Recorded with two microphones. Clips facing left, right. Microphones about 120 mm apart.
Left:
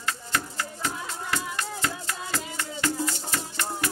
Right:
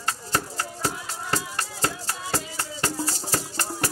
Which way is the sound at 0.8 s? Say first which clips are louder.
Right 2 dB; 35° right (ahead or behind).